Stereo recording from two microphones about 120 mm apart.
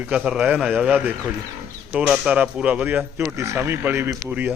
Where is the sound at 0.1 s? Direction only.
10° right (ahead or behind).